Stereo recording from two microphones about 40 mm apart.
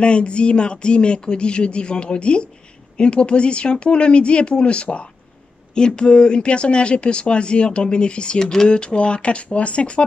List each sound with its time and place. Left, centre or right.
0.0 s speech: left